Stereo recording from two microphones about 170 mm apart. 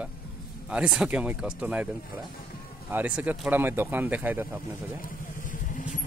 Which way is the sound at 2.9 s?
10° right (ahead or behind).